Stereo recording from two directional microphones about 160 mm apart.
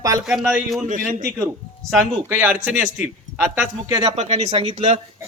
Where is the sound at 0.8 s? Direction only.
55° right (ahead or behind).